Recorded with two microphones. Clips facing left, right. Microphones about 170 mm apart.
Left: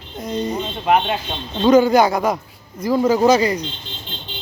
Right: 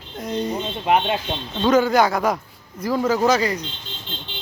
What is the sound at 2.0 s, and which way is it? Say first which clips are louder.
A woman's voice: left 2 dB; 15° left (ahead or behind).